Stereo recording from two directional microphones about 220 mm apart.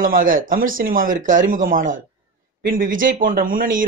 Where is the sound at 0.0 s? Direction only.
40° right (ahead or behind).